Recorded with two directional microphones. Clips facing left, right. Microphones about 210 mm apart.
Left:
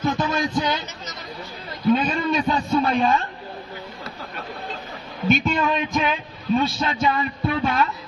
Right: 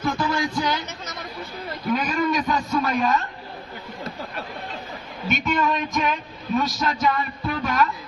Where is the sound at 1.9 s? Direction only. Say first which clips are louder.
Left 3 dB; 25° left (ahead or behind).